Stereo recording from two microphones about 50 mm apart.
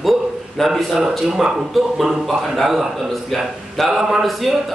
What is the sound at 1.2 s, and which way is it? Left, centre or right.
A man's voice, centre.